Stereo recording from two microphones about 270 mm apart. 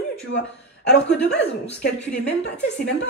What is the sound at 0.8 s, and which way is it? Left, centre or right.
Speech, left.